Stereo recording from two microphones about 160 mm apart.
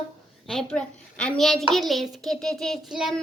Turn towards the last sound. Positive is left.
turn(degrees=0)  # may be behind; listen again after turning